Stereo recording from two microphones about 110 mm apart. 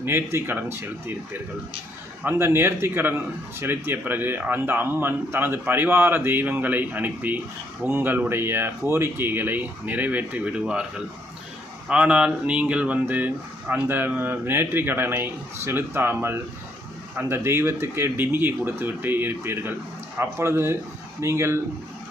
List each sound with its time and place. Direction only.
0.0 s speech: 20° right (ahead or behind)
11.9 s speech: 10° right (ahead or behind)